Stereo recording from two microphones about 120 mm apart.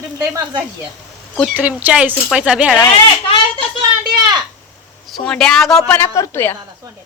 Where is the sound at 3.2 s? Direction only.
50° left (ahead or behind).